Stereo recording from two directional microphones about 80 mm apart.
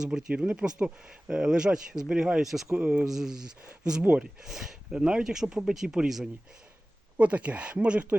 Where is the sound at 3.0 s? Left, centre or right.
Centre.